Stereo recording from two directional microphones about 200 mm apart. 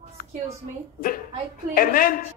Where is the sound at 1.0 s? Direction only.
45° left (ahead or behind).